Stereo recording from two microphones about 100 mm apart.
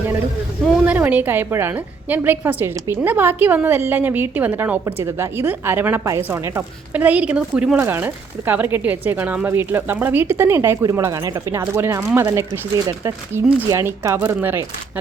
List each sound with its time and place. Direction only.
0.6 s speech: 5° right (ahead or behind)
0.9 s a woman's voice: 15° right (ahead or behind)